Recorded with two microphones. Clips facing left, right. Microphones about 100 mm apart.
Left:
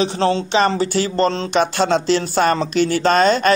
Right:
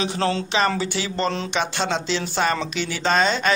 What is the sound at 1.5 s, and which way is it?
Speech, 50° left (ahead or behind).